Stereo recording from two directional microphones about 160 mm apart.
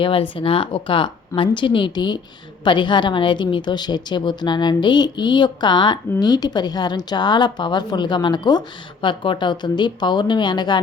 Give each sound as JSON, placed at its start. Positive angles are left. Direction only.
{"t": 0.0, "sound": "a woman's voice", "side_deg": 35}